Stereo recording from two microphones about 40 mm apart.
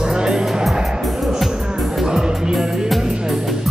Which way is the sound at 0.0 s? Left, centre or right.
Centre.